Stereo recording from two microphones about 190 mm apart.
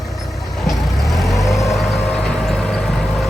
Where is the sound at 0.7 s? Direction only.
Centre (ahead or behind).